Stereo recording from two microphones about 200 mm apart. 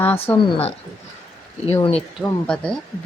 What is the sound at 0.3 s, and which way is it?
Speech, 10° left (ahead or behind).